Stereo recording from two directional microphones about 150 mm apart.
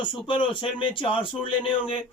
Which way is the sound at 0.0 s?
35° left (ahead or behind).